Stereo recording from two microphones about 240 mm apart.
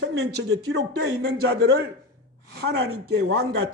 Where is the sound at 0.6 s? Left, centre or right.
Right.